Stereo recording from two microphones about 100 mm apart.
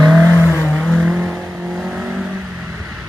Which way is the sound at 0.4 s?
15° right (ahead or behind).